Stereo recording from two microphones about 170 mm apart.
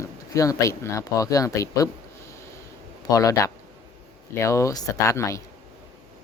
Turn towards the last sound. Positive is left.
turn(degrees=20)  # may be behind; listen again after turning